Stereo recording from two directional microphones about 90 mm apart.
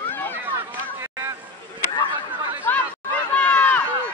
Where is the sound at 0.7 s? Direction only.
30° right (ahead or behind).